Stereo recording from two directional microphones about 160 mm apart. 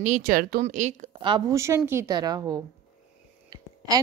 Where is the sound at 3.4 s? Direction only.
25° right (ahead or behind).